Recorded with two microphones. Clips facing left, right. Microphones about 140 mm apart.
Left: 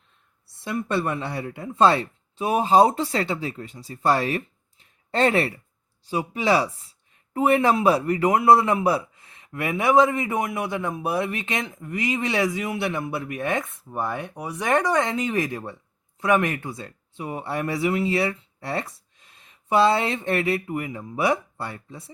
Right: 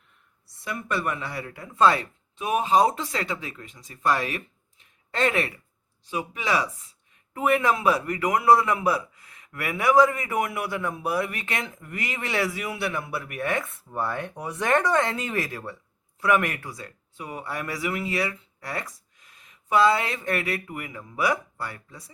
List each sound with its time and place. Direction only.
0.4 s a man's voice: 25° left (ahead or behind)